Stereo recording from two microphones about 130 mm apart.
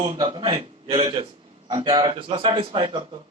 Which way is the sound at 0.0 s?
35° right (ahead or behind).